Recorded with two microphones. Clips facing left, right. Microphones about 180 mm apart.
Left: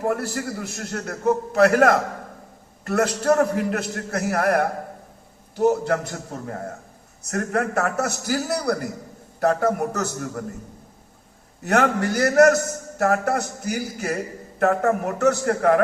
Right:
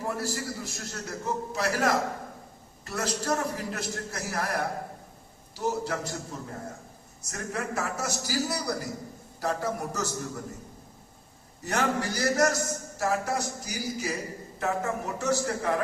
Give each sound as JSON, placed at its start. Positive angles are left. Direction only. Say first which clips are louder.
{"t": 0.0, "sound": "a man's voice", "louder": "left 7 dB", "side_deg": 60}
{"t": 11.6, "sound": "a man's voice", "louder": "left 8 dB", "side_deg": 65}